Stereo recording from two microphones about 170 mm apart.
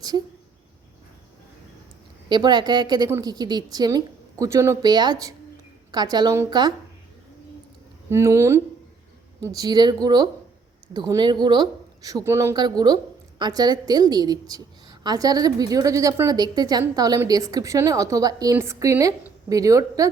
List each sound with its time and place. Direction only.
2.3 s a woman's voice: 25° right (ahead or behind)
8.1 s a woman's voice: 15° right (ahead or behind)